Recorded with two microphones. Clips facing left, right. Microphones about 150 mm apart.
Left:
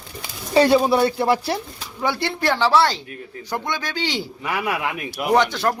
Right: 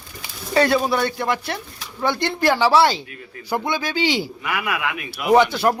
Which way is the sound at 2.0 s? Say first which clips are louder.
Right 2 dB; 5° left (ahead or behind).